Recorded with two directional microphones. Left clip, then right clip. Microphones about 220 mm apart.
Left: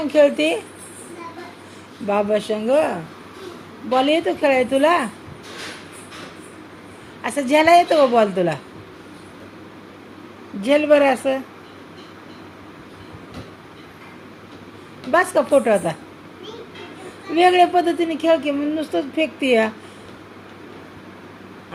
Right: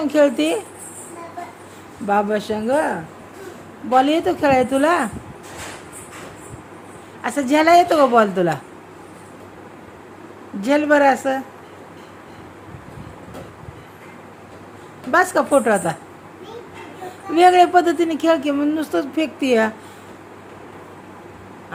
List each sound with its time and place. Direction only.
0.1 s a woman's voice: 20° right (ahead or behind)
2.0 s a woman's voice: 15° right (ahead or behind)
7.2 s a woman's voice: 20° right (ahead or behind)
10.6 s a woman's voice: 15° right (ahead or behind)
15.1 s a woman's voice: 15° right (ahead or behind)
17.3 s a woman's voice: 20° right (ahead or behind)